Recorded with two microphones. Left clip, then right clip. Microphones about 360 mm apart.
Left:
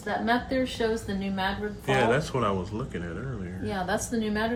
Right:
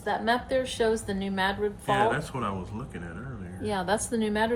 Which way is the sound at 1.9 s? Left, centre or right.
Centre.